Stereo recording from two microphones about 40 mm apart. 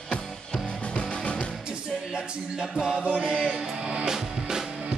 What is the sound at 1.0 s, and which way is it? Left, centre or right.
Music, left.